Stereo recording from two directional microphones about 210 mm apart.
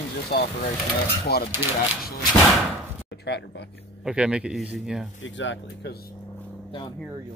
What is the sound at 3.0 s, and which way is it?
Speech, 55° left (ahead or behind).